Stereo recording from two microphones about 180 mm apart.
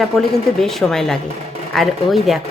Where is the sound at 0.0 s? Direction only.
Centre (ahead or behind).